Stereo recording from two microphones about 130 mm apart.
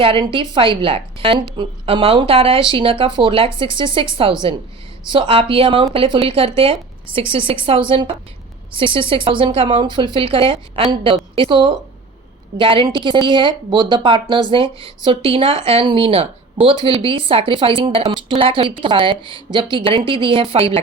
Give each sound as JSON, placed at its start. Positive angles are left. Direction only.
{"t": 0.0, "sound": "speech", "side_deg": -40}